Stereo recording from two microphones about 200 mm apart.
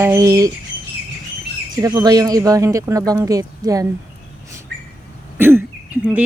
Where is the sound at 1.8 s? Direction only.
20° right (ahead or behind).